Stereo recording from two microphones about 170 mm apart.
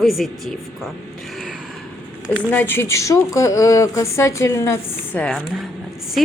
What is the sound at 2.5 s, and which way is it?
A woman's voice, 10° left (ahead or behind).